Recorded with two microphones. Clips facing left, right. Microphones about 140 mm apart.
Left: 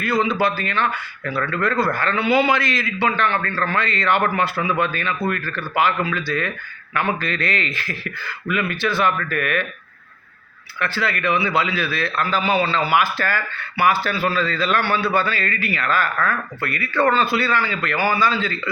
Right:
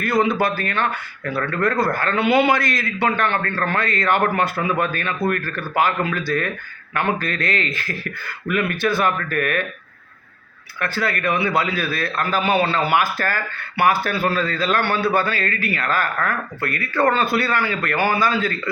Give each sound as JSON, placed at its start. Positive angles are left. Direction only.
{"t": 0.0, "sound": "a man's voice", "side_deg": -45}
{"t": 10.8, "sound": "a man's voice", "side_deg": -45}